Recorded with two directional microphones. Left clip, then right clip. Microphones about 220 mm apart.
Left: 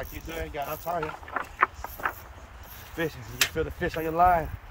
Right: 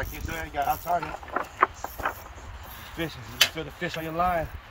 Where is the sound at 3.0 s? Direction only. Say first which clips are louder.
Right 3 dB; 20° left (ahead or behind).